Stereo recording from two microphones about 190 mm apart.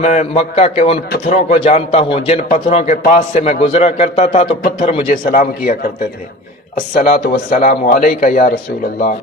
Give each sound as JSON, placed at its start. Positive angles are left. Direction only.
{"t": 0.0, "sound": "a man's voice", "side_deg": 40}